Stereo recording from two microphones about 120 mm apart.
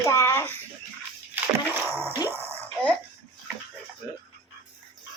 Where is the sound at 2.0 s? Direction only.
20° right (ahead or behind).